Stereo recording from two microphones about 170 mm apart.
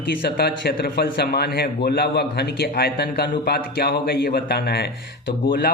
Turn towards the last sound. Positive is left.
turn(degrees=65)  # may be behind; listen again after turning